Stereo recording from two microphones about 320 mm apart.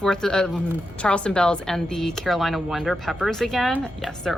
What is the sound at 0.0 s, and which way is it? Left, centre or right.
Speech, centre.